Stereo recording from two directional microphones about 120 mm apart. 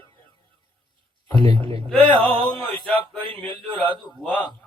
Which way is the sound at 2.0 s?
45° right (ahead or behind).